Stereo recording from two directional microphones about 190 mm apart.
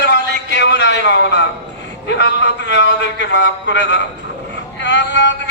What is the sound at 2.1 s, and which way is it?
A man's voice, 65° left (ahead or behind).